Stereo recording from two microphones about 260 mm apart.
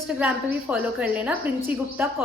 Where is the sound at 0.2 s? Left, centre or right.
Centre.